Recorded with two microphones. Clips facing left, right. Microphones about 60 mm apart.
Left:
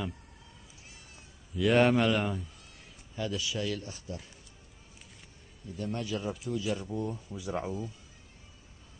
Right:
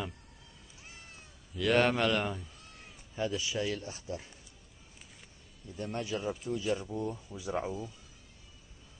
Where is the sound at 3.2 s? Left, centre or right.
Right.